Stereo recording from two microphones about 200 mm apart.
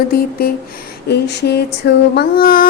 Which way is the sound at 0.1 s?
50° left (ahead or behind).